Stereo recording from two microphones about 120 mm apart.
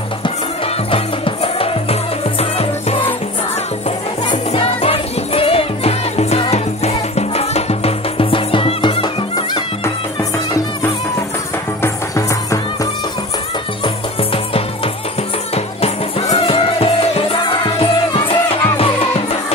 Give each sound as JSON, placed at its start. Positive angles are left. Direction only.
{"t": 0.9, "sound": "music", "side_deg": 50}
{"t": 4.5, "sound": "music", "side_deg": 55}
{"t": 11.8, "sound": "music", "side_deg": 25}
{"t": 13.8, "sound": "music", "side_deg": 50}